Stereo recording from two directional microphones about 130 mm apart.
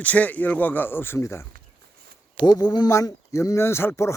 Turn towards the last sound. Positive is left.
turn(degrees=20)  # may be behind; listen again after turning